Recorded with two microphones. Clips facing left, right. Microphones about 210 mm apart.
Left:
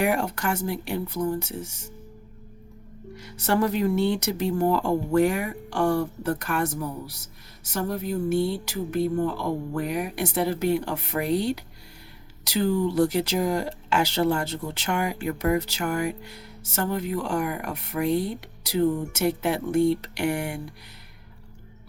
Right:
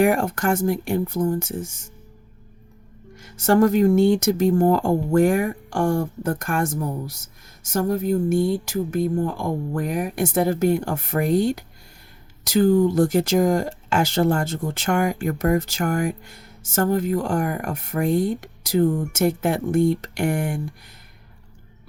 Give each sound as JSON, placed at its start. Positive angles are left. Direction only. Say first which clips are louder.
{"t": 0.0, "sound": "speech", "louder": "right 5 dB", "side_deg": -50}
{"t": 3.2, "sound": "speech", "louder": "right 7 dB", "side_deg": -45}